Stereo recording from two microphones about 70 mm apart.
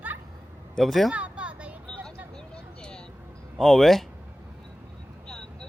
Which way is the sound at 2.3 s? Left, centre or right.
Centre.